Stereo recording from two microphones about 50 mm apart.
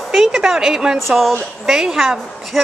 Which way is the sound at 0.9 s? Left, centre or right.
Centre.